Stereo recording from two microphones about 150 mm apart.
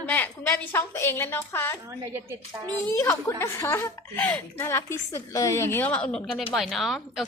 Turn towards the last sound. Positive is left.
turn(degrees=0)  # may be behind; listen again after turning